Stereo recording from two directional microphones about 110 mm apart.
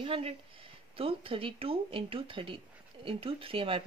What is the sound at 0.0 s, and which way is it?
A woman's voice, 60° right (ahead or behind).